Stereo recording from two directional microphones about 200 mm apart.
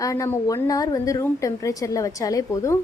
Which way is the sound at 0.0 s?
15° left (ahead or behind).